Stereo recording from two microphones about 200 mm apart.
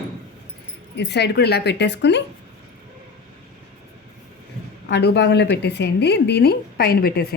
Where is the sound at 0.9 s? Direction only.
55° left (ahead or behind).